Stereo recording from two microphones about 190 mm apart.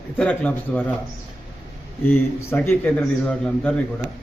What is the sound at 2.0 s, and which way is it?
A man's voice, 10° left (ahead or behind).